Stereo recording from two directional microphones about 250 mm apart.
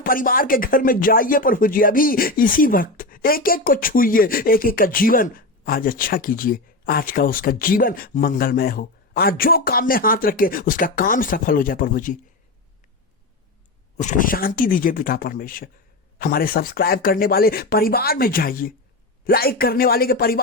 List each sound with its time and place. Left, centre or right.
0.0 s speech: left
13.9 s speech: left